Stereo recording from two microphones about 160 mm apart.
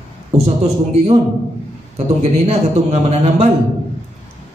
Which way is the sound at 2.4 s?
45° right (ahead or behind).